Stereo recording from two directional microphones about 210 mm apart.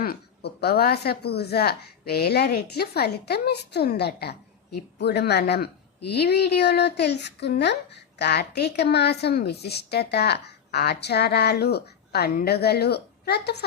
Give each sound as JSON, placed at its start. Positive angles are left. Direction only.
{"t": 0.0, "sound": "a woman's voice", "side_deg": 50}